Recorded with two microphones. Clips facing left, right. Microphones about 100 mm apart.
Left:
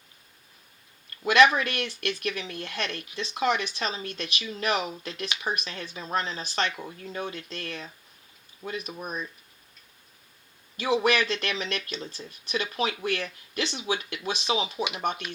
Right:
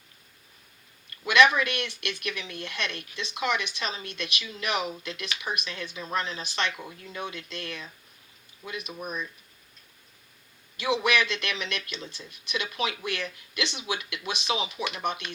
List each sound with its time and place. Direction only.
1.2 s speech: 35° left (ahead or behind)
10.8 s speech: 35° left (ahead or behind)